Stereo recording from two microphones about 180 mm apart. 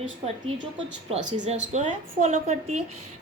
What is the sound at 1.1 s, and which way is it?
A woman's voice, 40° right (ahead or behind).